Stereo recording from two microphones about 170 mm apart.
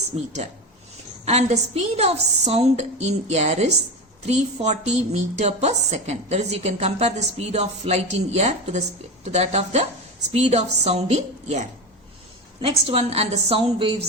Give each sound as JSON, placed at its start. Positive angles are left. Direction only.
{"t": 0.1, "sound": "a woman's voice", "side_deg": -35}